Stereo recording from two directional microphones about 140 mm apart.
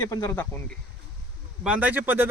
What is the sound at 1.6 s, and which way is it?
Speech, 10° right (ahead or behind).